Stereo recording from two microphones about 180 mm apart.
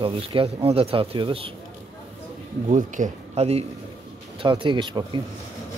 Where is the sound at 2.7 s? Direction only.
45° right (ahead or behind); by 5.2 s 25° right (ahead or behind).